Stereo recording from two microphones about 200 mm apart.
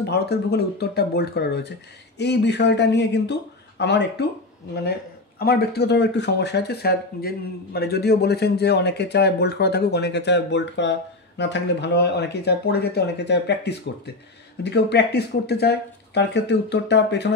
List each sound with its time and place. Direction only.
0.0 s speech: 55° left (ahead or behind)
5.4 s speech: 50° left (ahead or behind)